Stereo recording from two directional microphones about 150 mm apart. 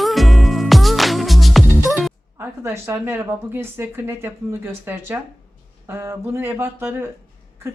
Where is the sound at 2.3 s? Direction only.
15° right (ahead or behind).